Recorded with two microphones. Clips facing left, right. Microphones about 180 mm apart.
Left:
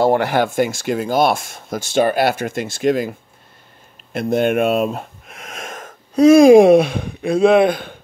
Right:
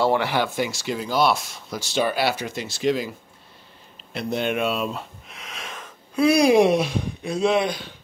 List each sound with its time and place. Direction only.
0.0 s speech: 50° left (ahead or behind)